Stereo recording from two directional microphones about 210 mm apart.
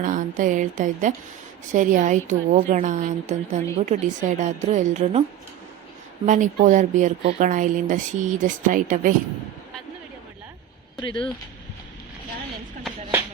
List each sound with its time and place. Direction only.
0.0 s a woman's voice: 40° right (ahead or behind)
6.2 s a woman's voice: 35° right (ahead or behind)
11.0 s speech: 25° left (ahead or behind)